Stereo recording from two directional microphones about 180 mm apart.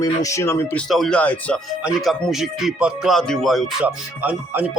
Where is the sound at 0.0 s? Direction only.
20° left (ahead or behind).